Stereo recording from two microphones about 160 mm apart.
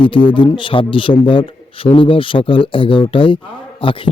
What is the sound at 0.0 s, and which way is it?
A man's voice, 30° left (ahead or behind).